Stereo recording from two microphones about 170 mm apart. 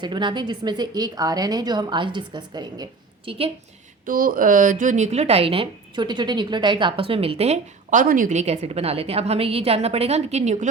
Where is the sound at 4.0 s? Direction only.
55° right (ahead or behind); by 8.0 s 40° right (ahead or behind).